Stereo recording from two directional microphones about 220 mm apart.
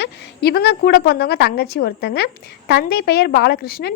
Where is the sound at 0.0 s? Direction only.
45° left (ahead or behind).